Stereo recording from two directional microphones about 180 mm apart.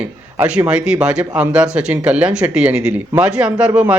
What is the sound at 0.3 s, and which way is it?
A man's voice, 10° right (ahead or behind).